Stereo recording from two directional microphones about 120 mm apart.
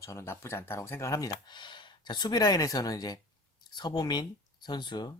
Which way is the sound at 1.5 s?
40° left (ahead or behind).